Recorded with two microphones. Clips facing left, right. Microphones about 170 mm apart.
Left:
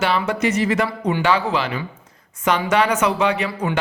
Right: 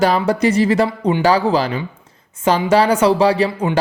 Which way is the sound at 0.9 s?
20° right (ahead or behind).